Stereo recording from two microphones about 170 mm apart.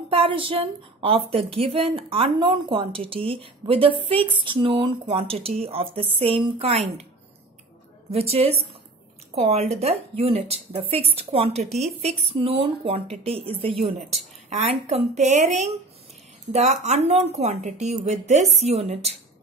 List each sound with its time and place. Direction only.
0.1 s a woman's voice: 30° right (ahead or behind)
8.1 s a woman's voice: 35° right (ahead or behind)